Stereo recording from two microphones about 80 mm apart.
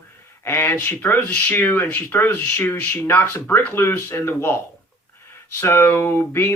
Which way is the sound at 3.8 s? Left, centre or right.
Left.